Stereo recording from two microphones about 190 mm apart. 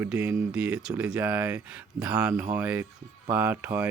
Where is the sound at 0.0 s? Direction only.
5° right (ahead or behind).